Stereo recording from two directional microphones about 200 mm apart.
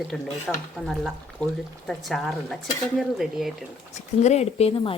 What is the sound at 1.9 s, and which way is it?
Speech, centre (ahead or behind).